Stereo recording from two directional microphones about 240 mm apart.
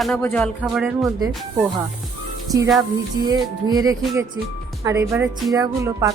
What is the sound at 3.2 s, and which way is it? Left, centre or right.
A woman's voice, centre.